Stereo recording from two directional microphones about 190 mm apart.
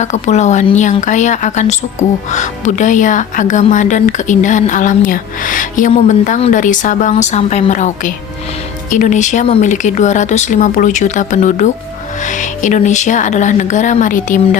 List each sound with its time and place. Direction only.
0.0 s a woman's voice: 35° left (ahead or behind)